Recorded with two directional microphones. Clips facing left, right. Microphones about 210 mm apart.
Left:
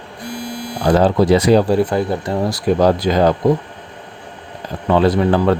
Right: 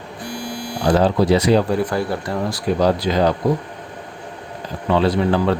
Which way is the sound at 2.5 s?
50° left (ahead or behind).